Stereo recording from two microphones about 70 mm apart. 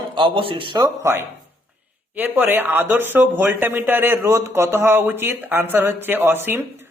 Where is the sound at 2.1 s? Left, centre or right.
Right.